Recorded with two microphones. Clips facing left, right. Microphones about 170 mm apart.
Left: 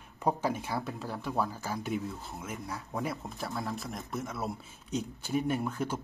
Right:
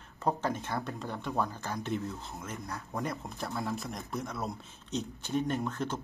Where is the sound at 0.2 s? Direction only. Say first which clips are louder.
Left 1 dB; 10° left (ahead or behind).